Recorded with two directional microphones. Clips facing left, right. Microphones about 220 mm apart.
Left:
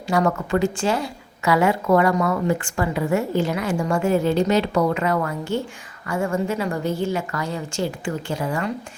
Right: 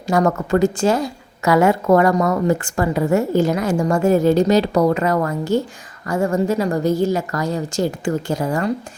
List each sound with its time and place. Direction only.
0.1 s a woman's voice: 45° right (ahead or behind)